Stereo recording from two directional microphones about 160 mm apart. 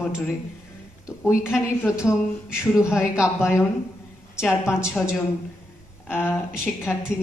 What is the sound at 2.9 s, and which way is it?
Speech, 5° right (ahead or behind).